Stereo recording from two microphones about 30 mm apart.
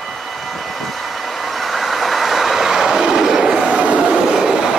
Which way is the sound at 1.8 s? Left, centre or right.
Centre.